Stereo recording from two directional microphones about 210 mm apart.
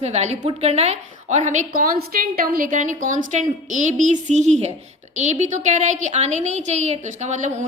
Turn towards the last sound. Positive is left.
turn(degrees=-35)  # may be behind; listen again after turning